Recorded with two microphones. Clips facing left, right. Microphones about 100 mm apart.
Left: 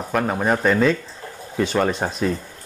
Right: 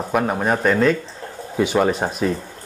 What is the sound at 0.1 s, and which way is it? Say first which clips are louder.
Speech: even; 5° right (ahead or behind).